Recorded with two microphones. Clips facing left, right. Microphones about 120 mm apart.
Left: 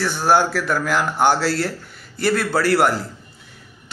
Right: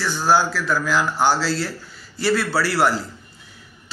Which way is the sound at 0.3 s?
60° left (ahead or behind).